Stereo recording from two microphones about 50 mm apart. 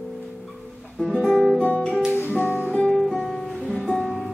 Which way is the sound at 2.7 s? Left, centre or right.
Centre.